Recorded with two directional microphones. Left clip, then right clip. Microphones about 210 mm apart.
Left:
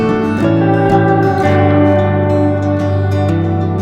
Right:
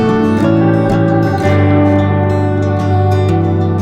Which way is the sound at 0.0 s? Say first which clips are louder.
Right 2 dB; centre (ahead or behind).